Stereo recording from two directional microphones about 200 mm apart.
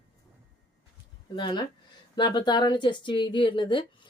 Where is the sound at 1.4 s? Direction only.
20° left (ahead or behind).